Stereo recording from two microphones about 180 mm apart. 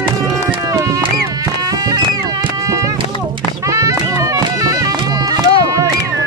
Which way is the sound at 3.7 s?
20° right (ahead or behind).